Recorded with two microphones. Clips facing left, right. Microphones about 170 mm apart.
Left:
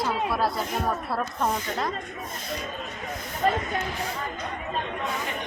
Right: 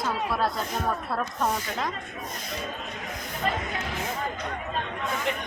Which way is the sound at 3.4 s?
45° left (ahead or behind).